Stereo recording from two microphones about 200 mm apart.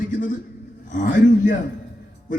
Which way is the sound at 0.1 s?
40° left (ahead or behind).